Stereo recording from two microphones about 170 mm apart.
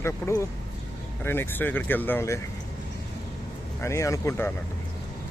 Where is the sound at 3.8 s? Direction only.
15° left (ahead or behind).